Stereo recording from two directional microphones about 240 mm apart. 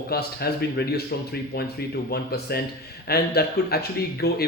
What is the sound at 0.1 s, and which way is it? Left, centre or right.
Speech, left.